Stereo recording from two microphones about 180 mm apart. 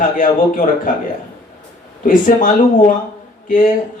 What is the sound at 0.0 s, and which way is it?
Speech, 45° left (ahead or behind).